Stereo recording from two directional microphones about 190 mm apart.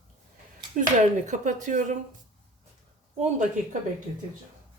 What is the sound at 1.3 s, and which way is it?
Speech, 40° right (ahead or behind).